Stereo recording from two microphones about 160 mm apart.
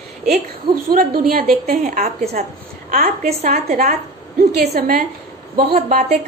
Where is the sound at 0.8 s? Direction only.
70° right (ahead or behind).